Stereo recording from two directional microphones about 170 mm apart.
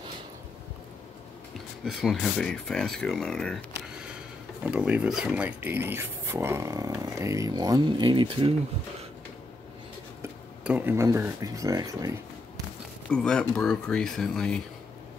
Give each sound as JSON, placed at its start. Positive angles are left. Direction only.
{"t": 1.9, "sound": "speech", "side_deg": 0}
{"t": 4.6, "sound": "speech", "side_deg": -5}
{"t": 10.6, "sound": "speech", "side_deg": -10}
{"t": 13.1, "sound": "speech", "side_deg": 5}